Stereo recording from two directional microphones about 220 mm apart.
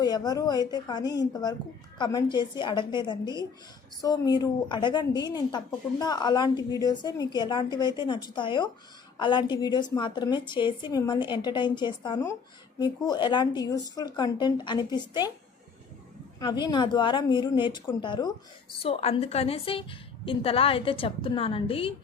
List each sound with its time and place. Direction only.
0.0 s a woman's voice: 20° left (ahead or behind)
16.4 s a woman's voice: 20° left (ahead or behind)